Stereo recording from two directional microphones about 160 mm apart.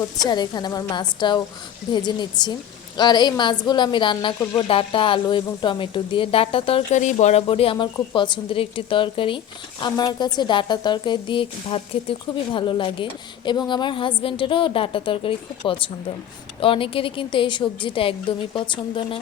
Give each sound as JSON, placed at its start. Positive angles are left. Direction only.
{"t": 0.2, "sound": "a woman's voice", "side_deg": 25}